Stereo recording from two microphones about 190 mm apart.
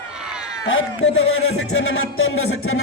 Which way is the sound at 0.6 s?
90° left.